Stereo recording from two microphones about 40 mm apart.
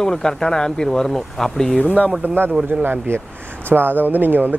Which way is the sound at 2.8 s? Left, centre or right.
Right.